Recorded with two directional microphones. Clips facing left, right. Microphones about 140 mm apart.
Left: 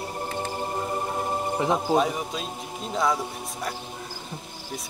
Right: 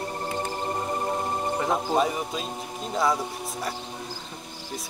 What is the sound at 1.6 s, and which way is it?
Speech, 5° left (ahead or behind).